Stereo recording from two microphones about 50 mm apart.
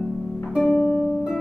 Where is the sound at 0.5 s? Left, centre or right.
Centre.